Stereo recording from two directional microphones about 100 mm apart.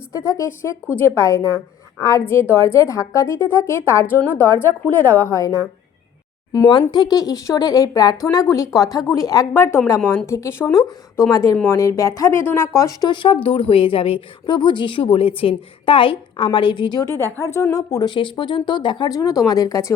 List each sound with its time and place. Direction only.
0.1 s a woman's voice: 35° left (ahead or behind); by 5.3 s 20° left (ahead or behind)
6.9 s a woman's voice: 40° left (ahead or behind)
10.7 s speech: 45° left (ahead or behind)
11.5 s a woman's voice: 20° left (ahead or behind)
11.8 s speech: 35° left (ahead or behind)
13.1 s a woman's voice: 55° left (ahead or behind)
17.1 s a woman's voice: 30° right (ahead or behind)
17.4 s speech: 35° left (ahead or behind); by 19.1 s 50° left (ahead or behind)
19.1 s speech: 35° left (ahead or behind)